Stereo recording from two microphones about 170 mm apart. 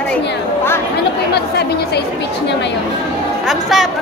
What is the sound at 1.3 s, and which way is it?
Speech, 75° left (ahead or behind).